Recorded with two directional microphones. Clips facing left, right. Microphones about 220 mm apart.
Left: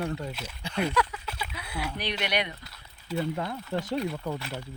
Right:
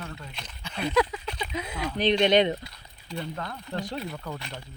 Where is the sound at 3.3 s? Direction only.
25° left (ahead or behind).